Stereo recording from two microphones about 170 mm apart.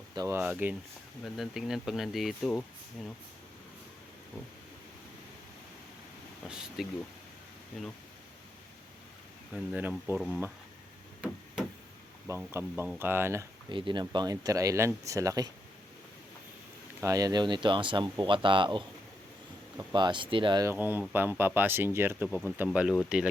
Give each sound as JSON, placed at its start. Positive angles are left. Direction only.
{"t": 0.1, "sound": "speech", "side_deg": -20}
{"t": 6.5, "sound": "speech", "side_deg": -5}
{"t": 9.5, "sound": "speech", "side_deg": -10}
{"t": 12.5, "sound": "speech", "side_deg": -15}
{"t": 13.7, "sound": "speech", "side_deg": -30}
{"t": 17.0, "sound": "speech", "side_deg": -20}
{"t": 19.9, "sound": "speech", "side_deg": -25}
{"t": 20.7, "sound": "speech", "side_deg": -10}